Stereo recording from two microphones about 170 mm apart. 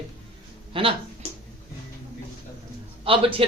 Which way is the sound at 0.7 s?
30° right (ahead or behind).